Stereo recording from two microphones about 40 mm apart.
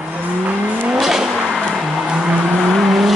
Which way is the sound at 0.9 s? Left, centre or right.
Centre.